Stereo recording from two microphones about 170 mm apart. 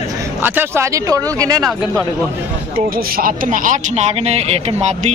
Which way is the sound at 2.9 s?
60° right (ahead or behind).